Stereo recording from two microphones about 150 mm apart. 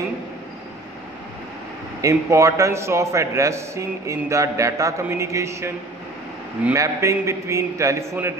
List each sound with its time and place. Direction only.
2.0 s a man's voice: 20° right (ahead or behind)